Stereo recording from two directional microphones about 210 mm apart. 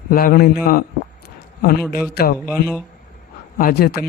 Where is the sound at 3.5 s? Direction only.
45° left (ahead or behind).